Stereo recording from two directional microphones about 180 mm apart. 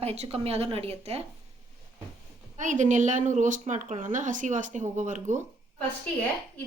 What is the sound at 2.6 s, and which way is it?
A woman's voice, 45° right (ahead or behind).